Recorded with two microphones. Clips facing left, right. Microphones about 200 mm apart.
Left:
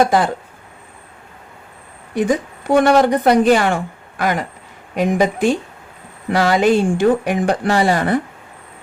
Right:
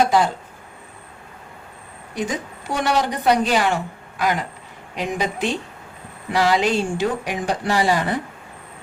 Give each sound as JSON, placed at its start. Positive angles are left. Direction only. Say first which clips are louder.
{"t": 0.0, "sound": "speech", "louder": "left 3 dB", "side_deg": 55}
{"t": 2.1, "sound": "speech", "louder": "left 8 dB", "side_deg": 55}